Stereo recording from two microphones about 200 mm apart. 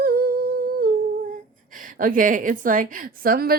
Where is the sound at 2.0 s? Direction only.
40° right (ahead or behind).